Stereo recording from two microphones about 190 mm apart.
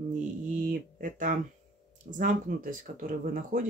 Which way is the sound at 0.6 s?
45° right (ahead or behind).